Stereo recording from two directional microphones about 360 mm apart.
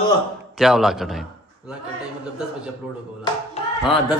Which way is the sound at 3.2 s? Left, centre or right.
Centre.